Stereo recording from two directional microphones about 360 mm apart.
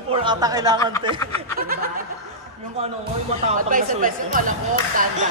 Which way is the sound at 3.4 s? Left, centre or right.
Right.